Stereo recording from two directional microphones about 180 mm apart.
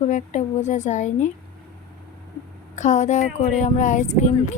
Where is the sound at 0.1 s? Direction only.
40° left (ahead or behind).